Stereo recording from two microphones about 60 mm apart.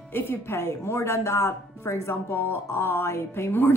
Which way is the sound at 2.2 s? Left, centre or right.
Left.